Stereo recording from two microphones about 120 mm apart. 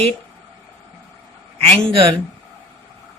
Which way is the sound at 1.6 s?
55° right (ahead or behind).